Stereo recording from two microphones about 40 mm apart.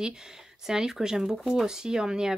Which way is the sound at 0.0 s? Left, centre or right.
Centre.